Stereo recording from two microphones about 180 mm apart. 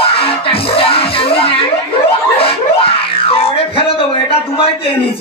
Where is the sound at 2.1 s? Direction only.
30° left (ahead or behind).